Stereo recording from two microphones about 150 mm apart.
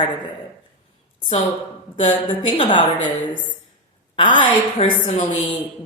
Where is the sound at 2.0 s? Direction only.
35° left (ahead or behind).